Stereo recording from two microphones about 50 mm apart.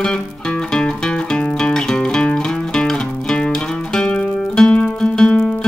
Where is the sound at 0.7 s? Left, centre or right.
Centre.